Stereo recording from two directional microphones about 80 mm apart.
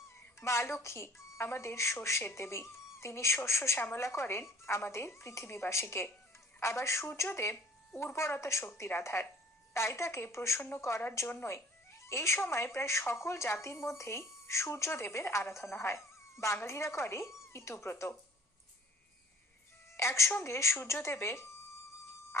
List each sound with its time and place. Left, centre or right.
0.3 s a woman's voice: left
20.0 s speech: left